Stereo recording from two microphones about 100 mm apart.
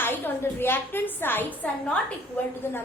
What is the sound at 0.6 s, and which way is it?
A woman's voice, 20° left (ahead or behind).